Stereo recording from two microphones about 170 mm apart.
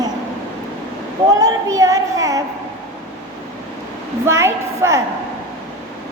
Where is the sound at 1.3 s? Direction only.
20° right (ahead or behind).